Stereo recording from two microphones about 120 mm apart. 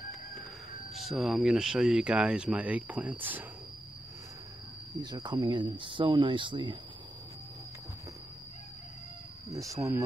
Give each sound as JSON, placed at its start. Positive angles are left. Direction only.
{"t": 0.9, "sound": "speech", "side_deg": 0}
{"t": 5.0, "sound": "speech", "side_deg": -40}
{"t": 9.5, "sound": "speech", "side_deg": -25}